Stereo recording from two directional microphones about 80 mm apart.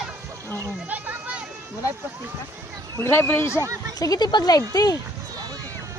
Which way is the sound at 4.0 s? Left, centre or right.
Left.